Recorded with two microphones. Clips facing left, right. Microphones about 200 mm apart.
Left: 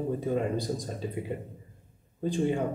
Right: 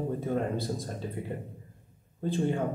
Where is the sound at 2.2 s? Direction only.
15° left (ahead or behind).